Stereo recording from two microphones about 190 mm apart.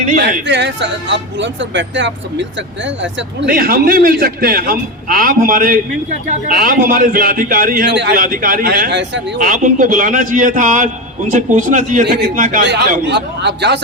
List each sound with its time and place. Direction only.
0.2 s speech: 65° right (ahead or behind)
3.5 s a man's voice: 50° right (ahead or behind)
9.4 s a man's voice: 45° right (ahead or behind)
13.1 s a man's voice: 65° right (ahead or behind)